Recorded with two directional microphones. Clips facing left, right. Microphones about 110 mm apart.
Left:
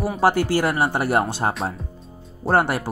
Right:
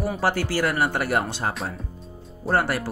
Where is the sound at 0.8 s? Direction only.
35° left (ahead or behind).